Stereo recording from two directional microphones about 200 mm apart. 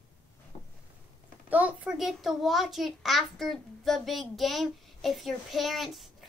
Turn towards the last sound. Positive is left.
turn(degrees=0)  # may be behind; listen again after turning